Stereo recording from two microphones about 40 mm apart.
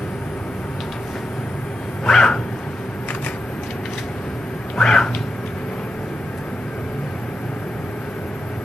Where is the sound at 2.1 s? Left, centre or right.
Centre.